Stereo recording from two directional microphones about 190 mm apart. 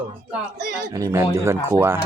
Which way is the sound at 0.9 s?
15° right (ahead or behind).